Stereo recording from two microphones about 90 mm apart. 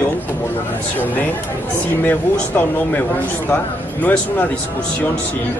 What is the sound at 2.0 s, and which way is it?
Speech, 20° left (ahead or behind).